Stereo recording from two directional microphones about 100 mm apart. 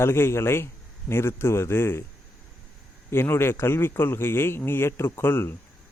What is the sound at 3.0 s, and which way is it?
Speech, 25° left (ahead or behind).